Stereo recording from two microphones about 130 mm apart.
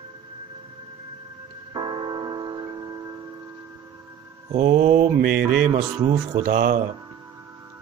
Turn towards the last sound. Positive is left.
turn(degrees=-90)